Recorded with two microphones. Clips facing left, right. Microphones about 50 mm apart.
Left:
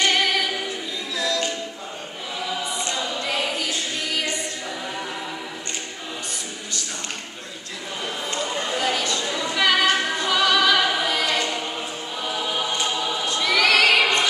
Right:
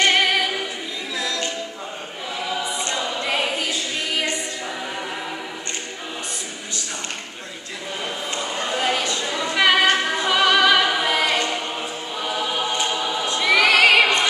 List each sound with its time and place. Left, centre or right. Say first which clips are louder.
0.0 s a capella: right 3 dB; right
2.5 s a capella: right 2 dB; centre
8.3 s a sound: even; centre
10.1 s music: right 2 dB; right
12.2 s choir: right 2 dB; centre
13.3 s singing: right 3 dB; centre